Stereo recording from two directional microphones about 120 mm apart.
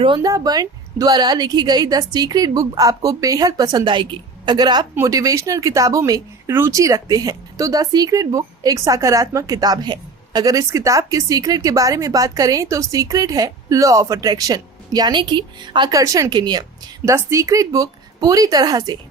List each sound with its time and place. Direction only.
0.2 s a woman's voice: 30° right (ahead or behind)
16.0 s a woman's voice: 30° right (ahead or behind)
17.1 s speech: 25° right (ahead or behind)